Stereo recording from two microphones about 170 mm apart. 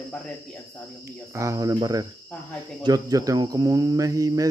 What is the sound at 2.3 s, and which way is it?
Speech, 10° left (ahead or behind).